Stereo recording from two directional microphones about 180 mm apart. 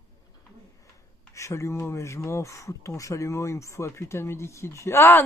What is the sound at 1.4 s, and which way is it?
Speech, 15° left (ahead or behind).